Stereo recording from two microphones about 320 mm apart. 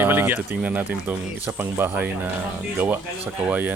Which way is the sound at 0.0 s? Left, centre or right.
Centre.